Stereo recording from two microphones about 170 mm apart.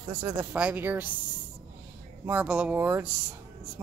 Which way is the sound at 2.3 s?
10° right (ahead or behind).